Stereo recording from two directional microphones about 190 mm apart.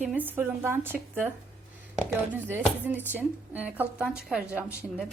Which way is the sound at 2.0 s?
10° right (ahead or behind).